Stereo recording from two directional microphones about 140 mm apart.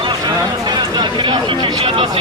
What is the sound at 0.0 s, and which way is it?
Speech, 30° right (ahead or behind).